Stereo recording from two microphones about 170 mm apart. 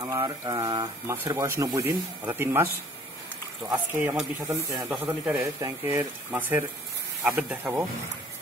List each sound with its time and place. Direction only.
0.0 s a man's voice: 25° right (ahead or behind)